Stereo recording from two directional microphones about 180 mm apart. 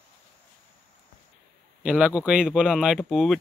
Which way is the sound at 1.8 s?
5° right (ahead or behind).